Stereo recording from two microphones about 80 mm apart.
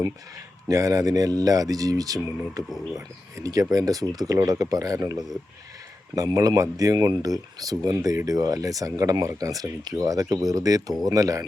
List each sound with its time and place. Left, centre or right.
0.7 s speech: right